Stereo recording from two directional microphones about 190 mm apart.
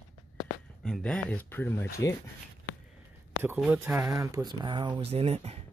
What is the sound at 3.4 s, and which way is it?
Speech, 10° right (ahead or behind).